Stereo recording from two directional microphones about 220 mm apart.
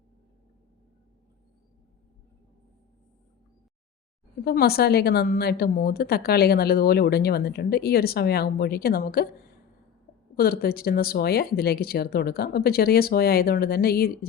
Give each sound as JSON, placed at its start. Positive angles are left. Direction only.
{"t": 4.4, "sound": "a woman's voice", "side_deg": 45}
{"t": 10.3, "sound": "a woman's voice", "side_deg": 45}